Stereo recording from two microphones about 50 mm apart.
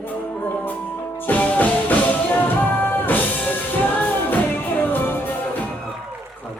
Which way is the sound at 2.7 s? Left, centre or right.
Left.